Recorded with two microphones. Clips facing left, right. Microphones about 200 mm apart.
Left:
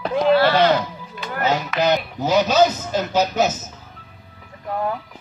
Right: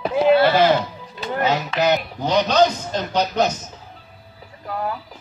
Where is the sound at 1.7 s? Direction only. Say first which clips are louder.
Even; centre (ahead or behind).